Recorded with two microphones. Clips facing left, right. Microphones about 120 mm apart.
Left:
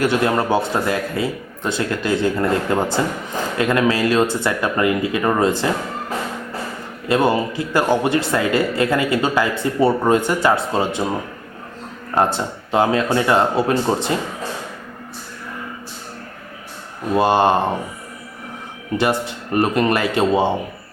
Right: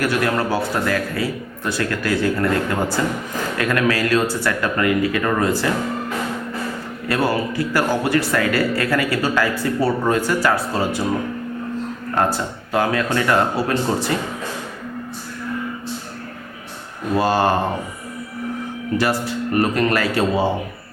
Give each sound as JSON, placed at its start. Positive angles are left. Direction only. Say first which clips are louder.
{"t": 0.0, "sound": "speech", "louder": "left 2 dB", "side_deg": 25}
{"t": 7.1, "sound": "speech", "louder": "left 3 dB", "side_deg": 20}
{"t": 12.1, "sound": "speech", "louder": "left 2 dB", "side_deg": 20}
{"t": 17.2, "sound": "speech", "louder": "left 3 dB", "side_deg": 20}
{"t": 18.9, "sound": "speech", "louder": "left 1 dB", "side_deg": 20}